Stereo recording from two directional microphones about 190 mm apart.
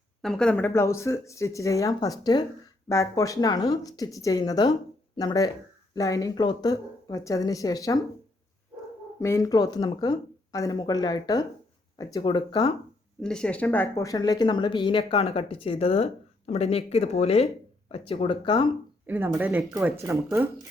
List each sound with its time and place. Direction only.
0.2 s speech: 5° left (ahead or behind)
9.2 s speech: 15° left (ahead or behind)
13.2 s speech: 5° left (ahead or behind); by 18.7 s 25° left (ahead or behind)
19.0 s speech: 10° right (ahead or behind)